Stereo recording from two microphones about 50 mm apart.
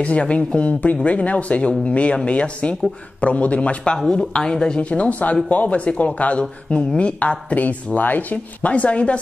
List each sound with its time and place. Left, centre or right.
0.0 s speech: left